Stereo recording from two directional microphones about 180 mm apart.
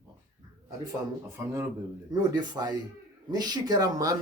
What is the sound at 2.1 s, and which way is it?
Speech, 25° right (ahead or behind).